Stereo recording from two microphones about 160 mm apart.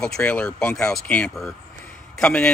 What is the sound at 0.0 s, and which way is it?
Speech, 5° left (ahead or behind).